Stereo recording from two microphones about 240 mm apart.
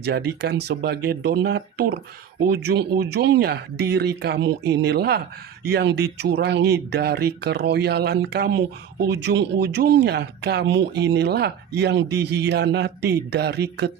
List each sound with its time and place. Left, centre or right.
0.0 s speech: right